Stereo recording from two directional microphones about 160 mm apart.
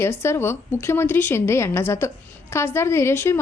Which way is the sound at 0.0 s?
15° left (ahead or behind).